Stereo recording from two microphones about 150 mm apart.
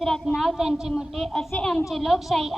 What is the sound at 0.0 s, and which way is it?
A woman's voice, centre (ahead or behind).